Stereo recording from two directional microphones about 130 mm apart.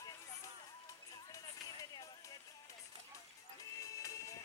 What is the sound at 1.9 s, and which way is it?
Music, 30° left (ahead or behind).